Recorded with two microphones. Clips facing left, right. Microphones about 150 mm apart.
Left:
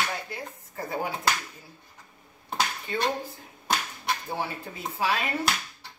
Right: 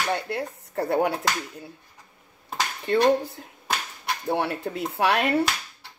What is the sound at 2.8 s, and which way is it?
Speech, 70° right (ahead or behind).